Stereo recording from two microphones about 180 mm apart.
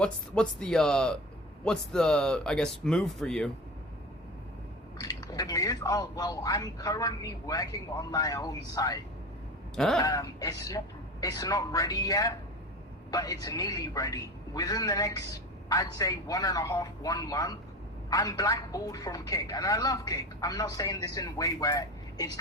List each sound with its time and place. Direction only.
0.0 s speech: 5° left (ahead or behind)
4.9 s a man's voice: 20° left (ahead or behind)
9.7 s speech: centre (ahead or behind)
10.0 s a man's voice: 20° left (ahead or behind)